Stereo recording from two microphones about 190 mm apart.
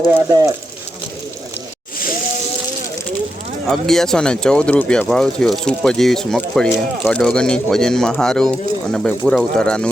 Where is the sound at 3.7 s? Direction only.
Centre (ahead or behind).